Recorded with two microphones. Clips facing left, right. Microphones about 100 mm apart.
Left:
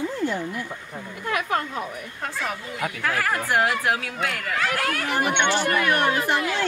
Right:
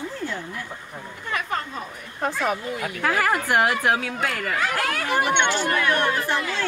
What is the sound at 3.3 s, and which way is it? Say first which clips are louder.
Speech: even; 15° right (ahead or behind).